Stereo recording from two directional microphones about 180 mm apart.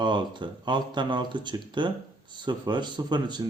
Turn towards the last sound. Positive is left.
turn(degrees=-25)  # may be behind; listen again after turning